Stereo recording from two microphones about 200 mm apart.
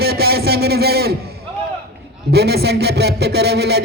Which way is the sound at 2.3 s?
55° right (ahead or behind).